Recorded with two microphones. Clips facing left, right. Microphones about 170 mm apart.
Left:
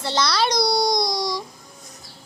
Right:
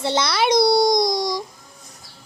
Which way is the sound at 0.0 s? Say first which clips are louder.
Right 2 dB; 20° right (ahead or behind).